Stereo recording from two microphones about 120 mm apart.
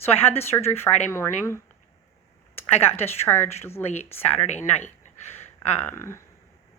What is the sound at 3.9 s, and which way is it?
Speech, 70° left (ahead or behind).